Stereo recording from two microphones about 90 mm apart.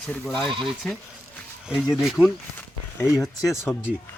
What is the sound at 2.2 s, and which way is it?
Speech, 15° left (ahead or behind).